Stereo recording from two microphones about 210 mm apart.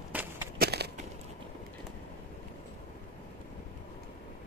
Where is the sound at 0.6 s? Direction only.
50° right (ahead or behind).